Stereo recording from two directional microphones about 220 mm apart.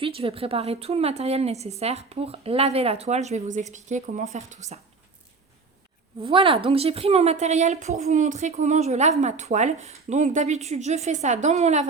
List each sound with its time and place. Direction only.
0.0 s a woman's voice: 25° right (ahead or behind)
6.2 s a woman's voice: 25° right (ahead or behind)